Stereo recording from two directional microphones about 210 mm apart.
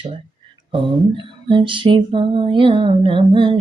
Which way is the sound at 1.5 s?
25° right (ahead or behind).